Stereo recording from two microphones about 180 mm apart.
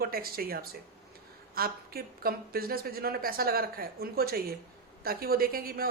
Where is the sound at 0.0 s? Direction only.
55° right (ahead or behind).